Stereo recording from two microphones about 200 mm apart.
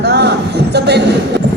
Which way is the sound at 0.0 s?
55° right (ahead or behind).